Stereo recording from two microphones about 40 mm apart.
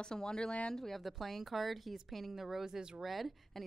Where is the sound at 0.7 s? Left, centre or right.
Centre.